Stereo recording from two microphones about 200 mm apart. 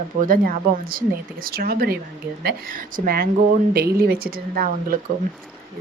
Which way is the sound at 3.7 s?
50° right (ahead or behind).